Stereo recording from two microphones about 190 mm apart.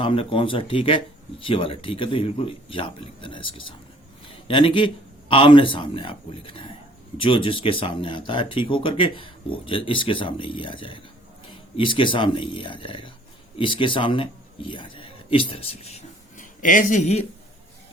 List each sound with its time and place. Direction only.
0.0 s speech: 30° left (ahead or behind)